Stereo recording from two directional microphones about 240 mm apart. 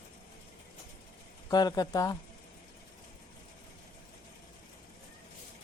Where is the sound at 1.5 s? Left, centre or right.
Centre.